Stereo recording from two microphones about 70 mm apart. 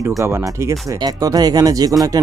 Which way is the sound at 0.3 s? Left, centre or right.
Right.